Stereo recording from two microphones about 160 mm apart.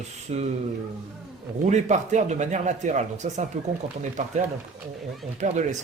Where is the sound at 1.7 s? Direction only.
50° right (ahead or behind).